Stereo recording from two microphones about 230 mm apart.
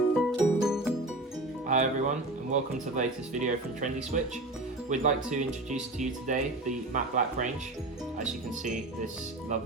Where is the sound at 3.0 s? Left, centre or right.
Right.